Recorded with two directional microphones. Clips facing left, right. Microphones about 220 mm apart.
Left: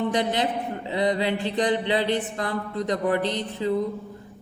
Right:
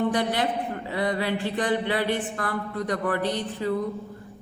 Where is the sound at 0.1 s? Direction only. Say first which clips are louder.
Left 1 dB; 20° left (ahead or behind).